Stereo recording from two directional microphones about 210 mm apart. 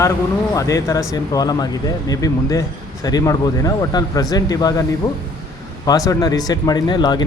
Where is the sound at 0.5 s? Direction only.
15° left (ahead or behind).